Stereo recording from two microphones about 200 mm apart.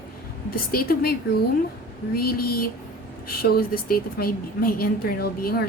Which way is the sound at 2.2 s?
50° left (ahead or behind).